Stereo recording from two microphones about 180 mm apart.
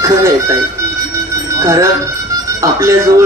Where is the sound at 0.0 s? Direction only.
15° right (ahead or behind).